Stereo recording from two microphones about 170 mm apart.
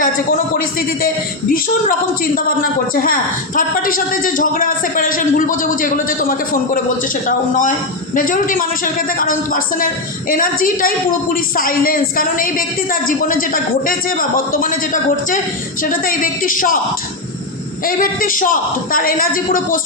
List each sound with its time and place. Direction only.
0.0 s a man's voice: 55° left (ahead or behind)
17.8 s a man's voice: 55° left (ahead or behind)